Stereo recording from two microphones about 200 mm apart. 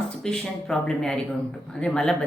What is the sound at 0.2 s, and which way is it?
Speech, 5° left (ahead or behind).